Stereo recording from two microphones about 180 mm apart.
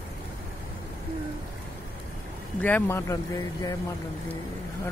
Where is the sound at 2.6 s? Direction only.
10° left (ahead or behind).